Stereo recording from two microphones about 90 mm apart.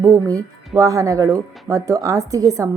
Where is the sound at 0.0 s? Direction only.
40° right (ahead or behind).